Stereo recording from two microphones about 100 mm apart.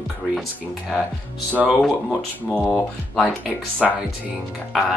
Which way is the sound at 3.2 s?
Centre (ahead or behind).